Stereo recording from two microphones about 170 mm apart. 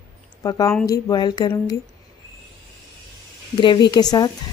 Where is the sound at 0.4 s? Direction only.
20° left (ahead or behind).